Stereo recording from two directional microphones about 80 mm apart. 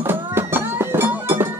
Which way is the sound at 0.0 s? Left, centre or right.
Right.